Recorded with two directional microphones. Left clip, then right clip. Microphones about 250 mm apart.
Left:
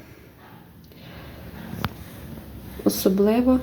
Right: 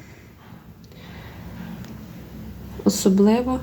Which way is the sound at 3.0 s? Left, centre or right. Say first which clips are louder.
Right 1 dB; centre.